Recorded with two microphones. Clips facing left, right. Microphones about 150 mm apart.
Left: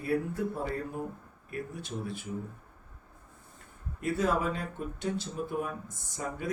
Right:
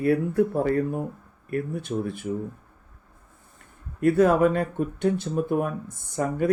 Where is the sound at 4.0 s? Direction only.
60° right (ahead or behind).